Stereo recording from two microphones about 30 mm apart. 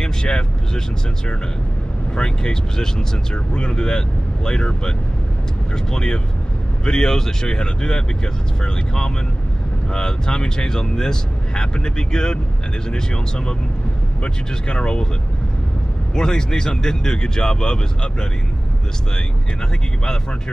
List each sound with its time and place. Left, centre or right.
0.0 s speech: left
2.1 s speech: left
3.5 s speech: left
14.2 s speech: left
16.2 s speech: left